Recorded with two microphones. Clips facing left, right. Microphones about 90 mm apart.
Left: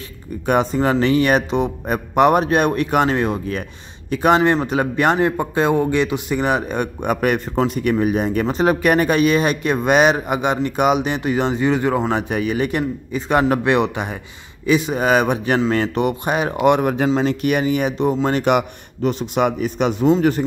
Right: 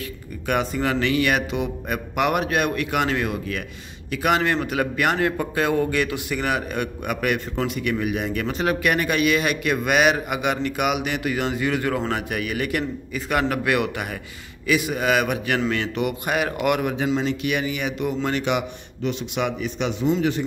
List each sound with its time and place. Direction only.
0.5 s a man's voice: 35° left (ahead or behind)
16.8 s a man's voice: 45° left (ahead or behind)